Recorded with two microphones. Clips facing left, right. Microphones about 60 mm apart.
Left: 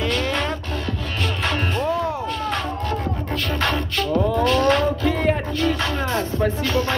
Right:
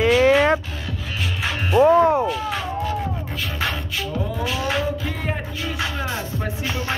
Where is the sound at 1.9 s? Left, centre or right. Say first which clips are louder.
Right 10 dB; right.